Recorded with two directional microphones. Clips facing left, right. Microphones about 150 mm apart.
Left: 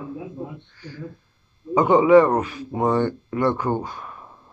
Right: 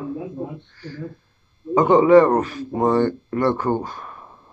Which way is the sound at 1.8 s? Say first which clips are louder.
Right 1 dB; 10° left (ahead or behind).